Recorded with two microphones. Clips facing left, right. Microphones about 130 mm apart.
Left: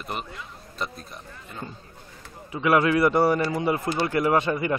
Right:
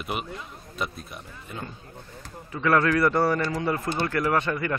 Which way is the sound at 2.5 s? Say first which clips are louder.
Left 1 dB; 15° left (ahead or behind).